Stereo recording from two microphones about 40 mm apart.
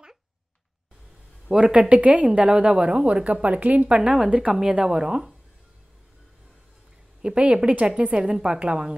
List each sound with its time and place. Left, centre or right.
1.6 s a woman's voice: right
2.0 s a woman's voice: right
4.0 s a woman's voice: right
4.5 s speech: centre
7.2 s a woman's voice: right